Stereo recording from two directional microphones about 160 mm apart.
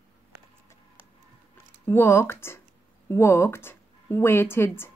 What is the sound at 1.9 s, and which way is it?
A woman's voice, 15° left (ahead or behind).